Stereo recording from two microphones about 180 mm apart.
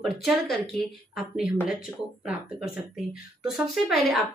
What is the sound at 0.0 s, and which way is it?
Speech, centre (ahead or behind).